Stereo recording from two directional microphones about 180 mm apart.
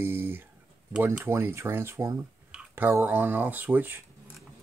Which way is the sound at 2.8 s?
15° right (ahead or behind).